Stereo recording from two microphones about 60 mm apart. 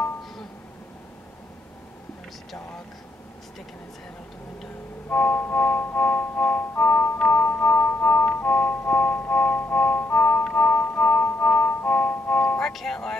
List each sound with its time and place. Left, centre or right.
5.1 s music: left; by 13.2 s centre